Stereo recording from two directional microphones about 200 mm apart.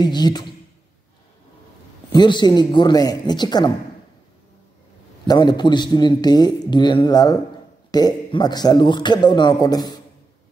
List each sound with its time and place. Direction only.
0.0 s a man's voice: 20° left (ahead or behind)
2.1 s a man's voice: 20° left (ahead or behind)
5.2 s a man's voice: 20° left (ahead or behind)